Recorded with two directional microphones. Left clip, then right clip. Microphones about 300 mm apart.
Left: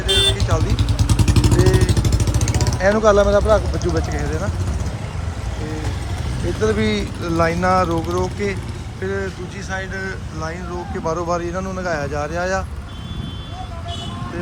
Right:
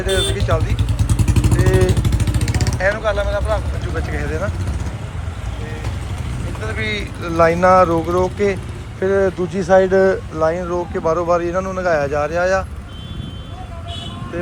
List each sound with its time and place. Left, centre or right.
0.0 s vehicle: centre
1.8 s vehicle: left
2.7 s speech: centre
3.9 s speech: centre
6.6 s speech: centre